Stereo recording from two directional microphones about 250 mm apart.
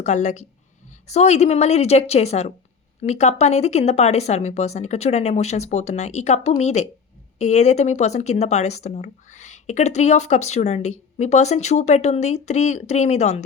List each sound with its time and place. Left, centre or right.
0.0 s speech: left